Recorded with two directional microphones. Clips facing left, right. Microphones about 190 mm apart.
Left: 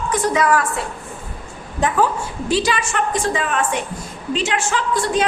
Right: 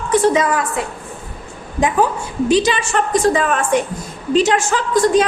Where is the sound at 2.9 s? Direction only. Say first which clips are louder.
Right 5 dB; 40° right (ahead or behind).